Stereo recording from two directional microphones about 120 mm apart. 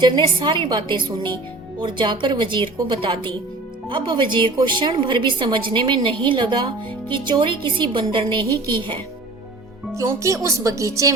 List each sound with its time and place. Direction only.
0.0 s a woman's voice: 40° right (ahead or behind)
9.9 s speech: 25° right (ahead or behind)